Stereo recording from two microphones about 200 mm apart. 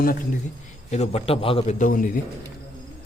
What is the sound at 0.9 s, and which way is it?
A man's voice, 30° left (ahead or behind).